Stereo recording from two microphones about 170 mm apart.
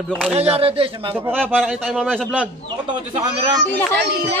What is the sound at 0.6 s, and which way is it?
Speech, 30° right (ahead or behind).